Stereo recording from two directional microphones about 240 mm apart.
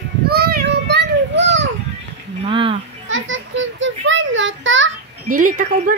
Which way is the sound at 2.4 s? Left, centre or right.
Right.